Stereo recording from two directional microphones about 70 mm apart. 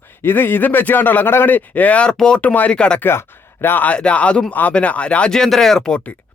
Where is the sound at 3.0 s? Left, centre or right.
Left.